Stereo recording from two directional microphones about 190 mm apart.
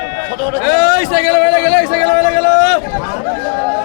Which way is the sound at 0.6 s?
60° left (ahead or behind).